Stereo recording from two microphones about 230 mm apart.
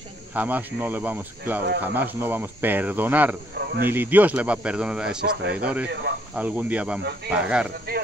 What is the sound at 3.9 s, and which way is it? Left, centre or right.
Speech, centre.